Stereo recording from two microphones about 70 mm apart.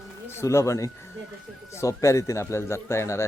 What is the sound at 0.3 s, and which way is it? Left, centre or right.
Speech, left.